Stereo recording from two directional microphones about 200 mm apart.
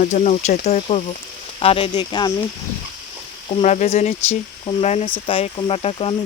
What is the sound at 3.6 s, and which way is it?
Speech, 35° left (ahead or behind).